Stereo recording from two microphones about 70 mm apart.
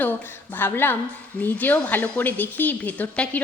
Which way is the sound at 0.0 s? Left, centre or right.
Left.